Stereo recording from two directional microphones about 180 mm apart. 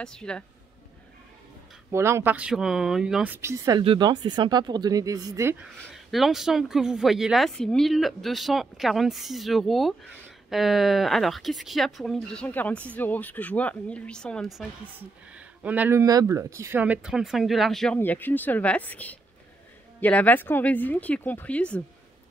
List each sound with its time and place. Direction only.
0.0 s speech: 5° left (ahead or behind)
1.9 s speech: 15° right (ahead or behind)
3.3 s speech: 15° right (ahead or behind)
6.1 s speech: centre (ahead or behind)
15.0 s speech: 10° right (ahead or behind); by 21.8 s 5° left (ahead or behind)